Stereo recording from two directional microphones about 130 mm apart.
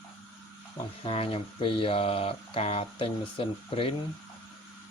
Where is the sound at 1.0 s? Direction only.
45° left (ahead or behind).